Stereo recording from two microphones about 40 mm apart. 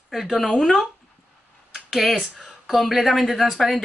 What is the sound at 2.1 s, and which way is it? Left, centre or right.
Speech, centre.